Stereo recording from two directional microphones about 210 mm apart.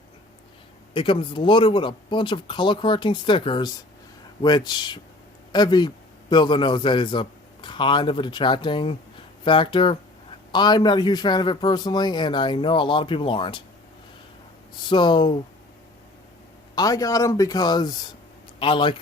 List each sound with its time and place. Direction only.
0.9 s a man's voice: 25° left (ahead or behind)
14.8 s a man's voice: 20° left (ahead or behind)
16.7 s a man's voice: 15° left (ahead or behind)